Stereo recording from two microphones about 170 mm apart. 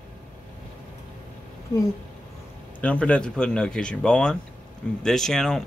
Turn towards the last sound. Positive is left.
turn(degrees=5)  # may be behind; listen again after turning